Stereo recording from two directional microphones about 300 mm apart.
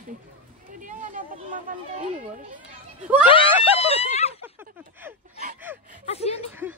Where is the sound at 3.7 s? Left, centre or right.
Centre.